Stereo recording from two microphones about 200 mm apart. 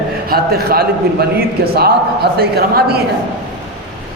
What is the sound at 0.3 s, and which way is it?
Speech, 50° right (ahead or behind).